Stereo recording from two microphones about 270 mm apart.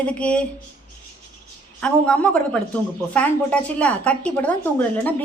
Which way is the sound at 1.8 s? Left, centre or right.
Centre.